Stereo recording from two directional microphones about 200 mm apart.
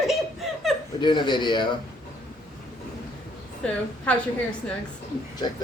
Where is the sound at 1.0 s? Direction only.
20° left (ahead or behind).